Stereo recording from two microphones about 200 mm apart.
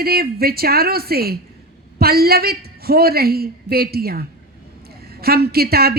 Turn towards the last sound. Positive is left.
turn(degrees=-50)  # may be behind; listen again after turning